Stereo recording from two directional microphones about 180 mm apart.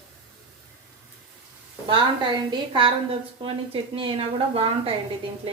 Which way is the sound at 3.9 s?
30° right (ahead or behind).